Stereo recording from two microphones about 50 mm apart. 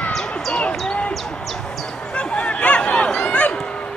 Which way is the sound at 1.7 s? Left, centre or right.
Centre.